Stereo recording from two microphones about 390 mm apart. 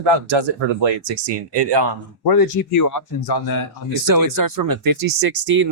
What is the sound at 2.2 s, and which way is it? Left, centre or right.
Speech, left.